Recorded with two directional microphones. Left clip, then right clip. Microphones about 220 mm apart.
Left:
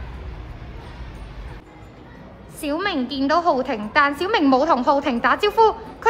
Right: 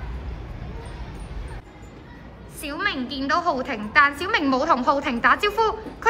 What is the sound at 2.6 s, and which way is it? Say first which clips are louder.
A woman's voice: left 3 dB; 20° left (ahead or behind).